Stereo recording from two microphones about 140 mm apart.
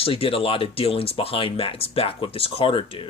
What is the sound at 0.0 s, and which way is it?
Speech, 40° left (ahead or behind).